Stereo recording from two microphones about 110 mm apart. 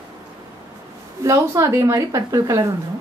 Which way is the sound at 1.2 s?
30° right (ahead or behind).